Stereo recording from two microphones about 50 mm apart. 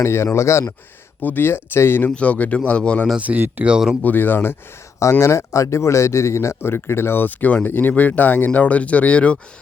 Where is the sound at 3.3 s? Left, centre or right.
Right.